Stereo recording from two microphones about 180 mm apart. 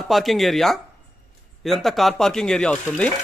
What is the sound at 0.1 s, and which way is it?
Speech, centre (ahead or behind).